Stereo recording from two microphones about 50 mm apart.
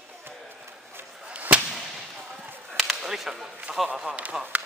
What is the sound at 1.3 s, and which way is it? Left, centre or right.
Whip, right.